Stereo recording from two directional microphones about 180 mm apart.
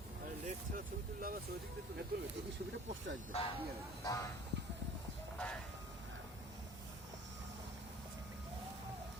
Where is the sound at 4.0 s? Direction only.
20° left (ahead or behind).